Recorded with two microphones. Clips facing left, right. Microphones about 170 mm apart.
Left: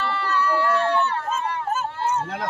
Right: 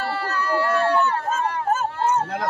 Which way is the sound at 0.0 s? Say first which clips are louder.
Left 1 dB; 40° right (ahead or behind).